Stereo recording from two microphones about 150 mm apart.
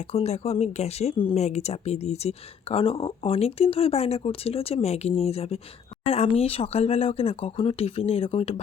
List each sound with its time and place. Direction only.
0.1 s speech: 45° left (ahead or behind)